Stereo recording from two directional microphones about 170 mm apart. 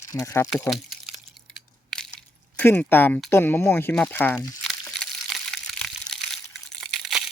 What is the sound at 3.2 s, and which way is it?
Speech, 15° left (ahead or behind).